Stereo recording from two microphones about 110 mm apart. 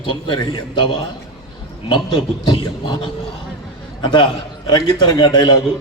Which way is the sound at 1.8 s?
50° left (ahead or behind).